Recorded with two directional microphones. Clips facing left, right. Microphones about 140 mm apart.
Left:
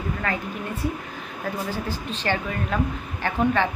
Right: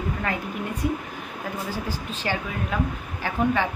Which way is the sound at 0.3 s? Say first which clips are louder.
Left 1 dB; 15° right (ahead or behind).